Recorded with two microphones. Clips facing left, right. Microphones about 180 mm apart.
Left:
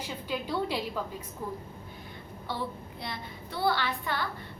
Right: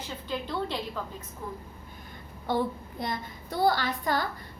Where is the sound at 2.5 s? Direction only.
45° right (ahead or behind).